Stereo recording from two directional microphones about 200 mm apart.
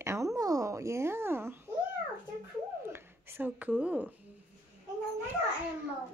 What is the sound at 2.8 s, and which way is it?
Speech, 10° right (ahead or behind).